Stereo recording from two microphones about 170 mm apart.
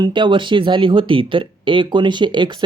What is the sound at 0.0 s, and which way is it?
Speech, 30° right (ahead or behind).